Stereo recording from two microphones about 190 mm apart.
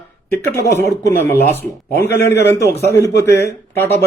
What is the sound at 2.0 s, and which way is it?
Speech, 60° left (ahead or behind).